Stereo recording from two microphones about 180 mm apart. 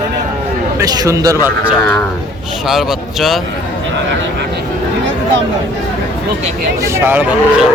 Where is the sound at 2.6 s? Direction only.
Centre (ahead or behind).